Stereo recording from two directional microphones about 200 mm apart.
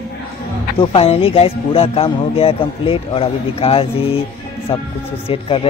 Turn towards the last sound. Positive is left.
turn(degrees=25)  # may be behind; listen again after turning